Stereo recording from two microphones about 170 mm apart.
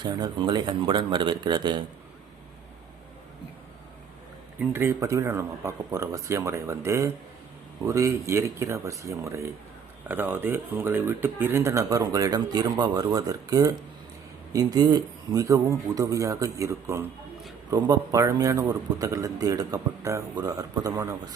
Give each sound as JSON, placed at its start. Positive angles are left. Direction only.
{"t": 0.0, "sound": "speech", "side_deg": -25}
{"t": 4.7, "sound": "speech", "side_deg": -15}